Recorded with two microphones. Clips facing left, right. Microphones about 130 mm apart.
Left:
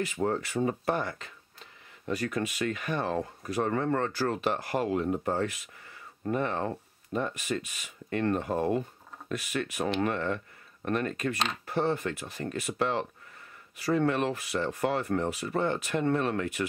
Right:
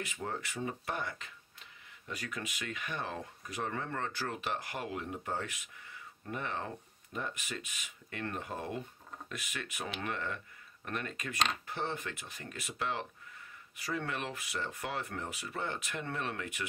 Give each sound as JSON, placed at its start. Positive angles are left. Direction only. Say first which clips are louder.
{"t": 0.2, "sound": "speech", "louder": "left 11 dB", "side_deg": 40}